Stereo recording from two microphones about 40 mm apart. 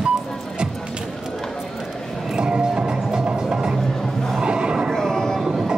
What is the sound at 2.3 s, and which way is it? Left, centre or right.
Music, centre.